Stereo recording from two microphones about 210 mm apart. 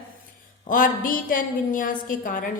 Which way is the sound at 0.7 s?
40° left (ahead or behind).